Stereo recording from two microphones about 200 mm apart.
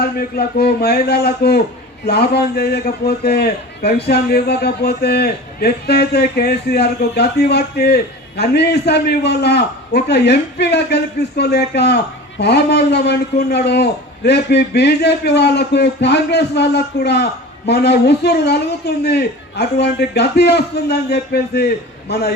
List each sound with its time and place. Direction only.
0.0 s a man's voice: 50° left (ahead or behind)